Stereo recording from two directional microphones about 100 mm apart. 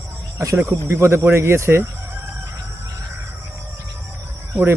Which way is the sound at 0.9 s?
25° right (ahead or behind).